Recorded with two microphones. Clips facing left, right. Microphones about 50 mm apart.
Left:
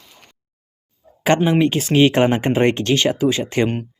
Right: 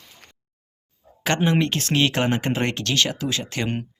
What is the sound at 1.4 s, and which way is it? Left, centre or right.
Speech, centre.